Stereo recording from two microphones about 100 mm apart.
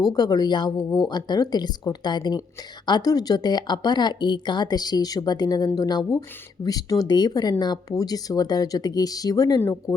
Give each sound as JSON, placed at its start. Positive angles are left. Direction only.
{"t": 0.0, "sound": "a woman's voice", "side_deg": 40}
{"t": 0.8, "sound": "speech", "side_deg": 30}
{"t": 1.0, "sound": "a woman's voice", "side_deg": 45}
{"t": 9.6, "sound": "speech", "side_deg": 30}